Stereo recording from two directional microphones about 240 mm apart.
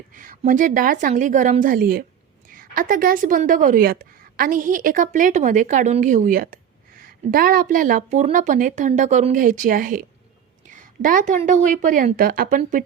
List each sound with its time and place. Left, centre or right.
0.1 s a woman's voice: right